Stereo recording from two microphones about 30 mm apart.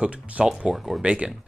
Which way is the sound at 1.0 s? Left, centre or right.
Right.